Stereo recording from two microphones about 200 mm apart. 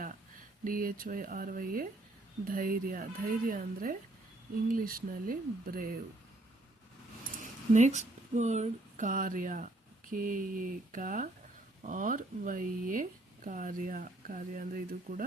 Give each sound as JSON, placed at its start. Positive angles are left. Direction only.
{"t": 0.6, "sound": "speech", "side_deg": -45}
{"t": 7.7, "sound": "speech", "side_deg": -35}